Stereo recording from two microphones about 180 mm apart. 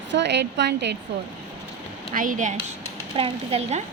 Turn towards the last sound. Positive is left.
turn(degrees=-35)  # may be behind; listen again after turning